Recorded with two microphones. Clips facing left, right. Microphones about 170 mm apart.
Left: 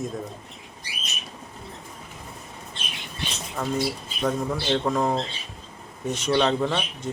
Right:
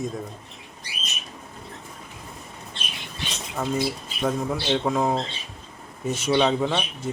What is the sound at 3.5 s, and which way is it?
Speech, 5° right (ahead or behind).